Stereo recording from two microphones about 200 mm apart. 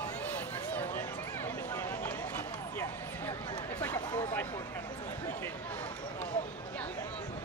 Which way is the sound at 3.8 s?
15° left (ahead or behind).